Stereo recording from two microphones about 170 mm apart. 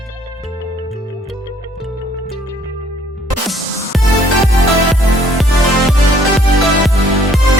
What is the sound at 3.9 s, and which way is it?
Music, centre (ahead or behind).